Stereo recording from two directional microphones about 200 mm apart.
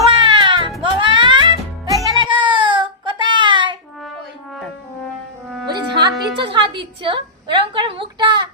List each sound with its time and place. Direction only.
0.0 s music: 25° right (ahead or behind)
2.1 s child singing: 25° right (ahead or behind)
5.6 s music: 20° right (ahead or behind)